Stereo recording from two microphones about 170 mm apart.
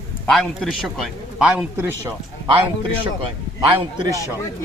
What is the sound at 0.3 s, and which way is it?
A man's voice, centre (ahead or behind).